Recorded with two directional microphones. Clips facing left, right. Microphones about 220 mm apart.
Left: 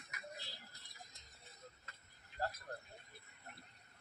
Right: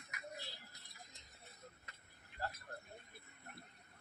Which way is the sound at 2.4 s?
40° left (ahead or behind).